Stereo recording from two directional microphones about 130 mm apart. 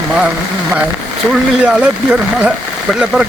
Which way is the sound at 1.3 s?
5° right (ahead or behind).